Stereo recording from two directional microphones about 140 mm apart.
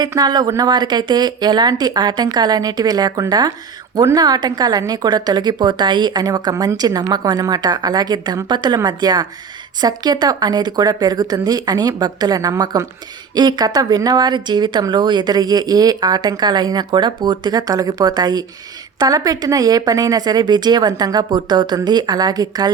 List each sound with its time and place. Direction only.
0.0 s speech: 30° right (ahead or behind)